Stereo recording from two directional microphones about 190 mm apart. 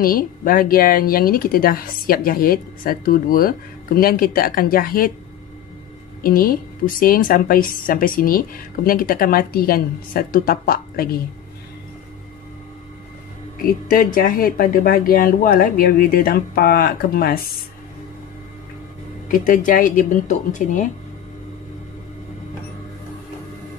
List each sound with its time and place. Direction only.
0.0 s a woman's voice: 50° left (ahead or behind)
6.2 s a woman's voice: 50° left (ahead or behind)
13.7 s a woman's voice: 50° left (ahead or behind)
19.2 s a woman's voice: 45° left (ahead or behind)